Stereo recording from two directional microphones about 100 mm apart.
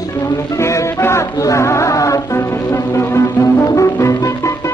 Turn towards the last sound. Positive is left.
turn(degrees=30)  # may be behind; listen again after turning